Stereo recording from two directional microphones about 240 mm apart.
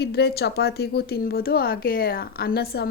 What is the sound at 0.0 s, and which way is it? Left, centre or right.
A woman's voice, left.